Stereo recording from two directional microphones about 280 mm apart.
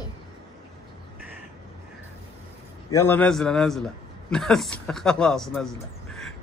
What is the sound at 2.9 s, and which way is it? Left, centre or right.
A man's voice, centre.